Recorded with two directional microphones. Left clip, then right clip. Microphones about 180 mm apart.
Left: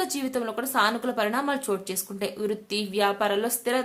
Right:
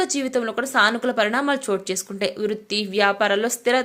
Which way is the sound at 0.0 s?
20° right (ahead or behind).